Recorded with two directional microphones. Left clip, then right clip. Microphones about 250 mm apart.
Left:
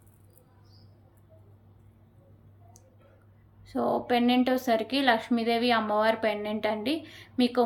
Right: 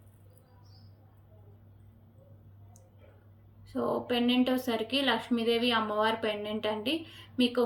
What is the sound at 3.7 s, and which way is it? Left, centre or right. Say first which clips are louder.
A woman's voice: left 4 dB; centre.